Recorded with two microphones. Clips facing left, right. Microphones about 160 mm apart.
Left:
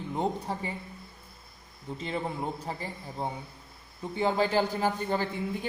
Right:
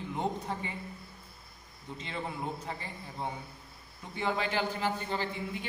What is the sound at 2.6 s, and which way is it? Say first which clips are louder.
A man's voice: left 4 dB; 35° left (ahead or behind).